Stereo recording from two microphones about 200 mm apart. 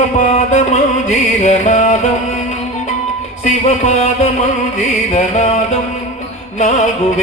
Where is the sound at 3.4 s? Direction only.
35° left (ahead or behind).